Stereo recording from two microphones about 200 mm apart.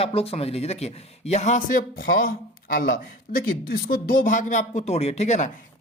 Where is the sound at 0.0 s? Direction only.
30° left (ahead or behind).